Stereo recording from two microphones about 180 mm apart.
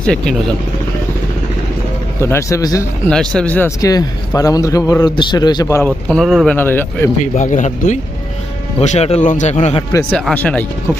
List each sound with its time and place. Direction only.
0.0 s speech: 5° left (ahead or behind)
2.2 s speech: 15° left (ahead or behind)
3.1 s speech: 5° left (ahead or behind)
3.8 s a man's voice: 20° left (ahead or behind)
6.1 s speech: centre (ahead or behind)
6.6 s speech: 10° left (ahead or behind)
7.2 s a man's voice: 45° left (ahead or behind)
9.9 s speech: 10° left (ahead or behind)